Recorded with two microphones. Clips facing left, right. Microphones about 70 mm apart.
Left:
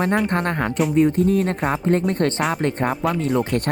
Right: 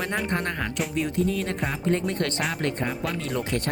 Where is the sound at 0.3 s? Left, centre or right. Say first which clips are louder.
Left 7 dB; left.